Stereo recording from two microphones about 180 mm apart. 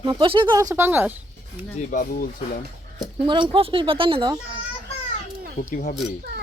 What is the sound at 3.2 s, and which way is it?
Speech, 25° right (ahead or behind).